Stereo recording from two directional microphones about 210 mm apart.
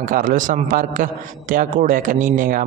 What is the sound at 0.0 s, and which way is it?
Speech, 40° right (ahead or behind).